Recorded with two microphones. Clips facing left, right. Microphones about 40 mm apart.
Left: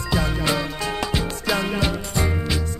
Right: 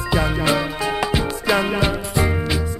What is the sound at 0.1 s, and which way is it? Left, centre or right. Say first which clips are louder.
Music: right 3 dB; centre.